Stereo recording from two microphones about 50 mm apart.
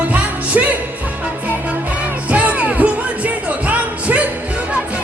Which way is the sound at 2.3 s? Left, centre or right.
Right.